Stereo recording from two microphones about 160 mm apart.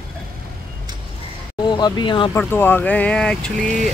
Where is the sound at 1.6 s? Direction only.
25° left (ahead or behind).